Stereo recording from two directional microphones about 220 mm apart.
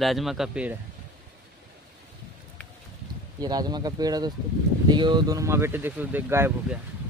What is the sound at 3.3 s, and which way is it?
Speech, 20° right (ahead or behind).